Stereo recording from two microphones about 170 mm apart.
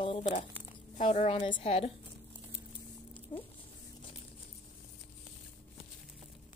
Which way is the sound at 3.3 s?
30° left (ahead or behind).